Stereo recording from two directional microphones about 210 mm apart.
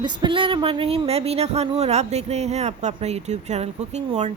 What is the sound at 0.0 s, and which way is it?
Speech, 20° right (ahead or behind).